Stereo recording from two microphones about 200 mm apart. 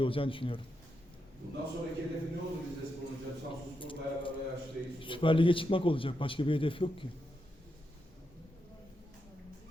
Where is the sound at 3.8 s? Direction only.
25° left (ahead or behind).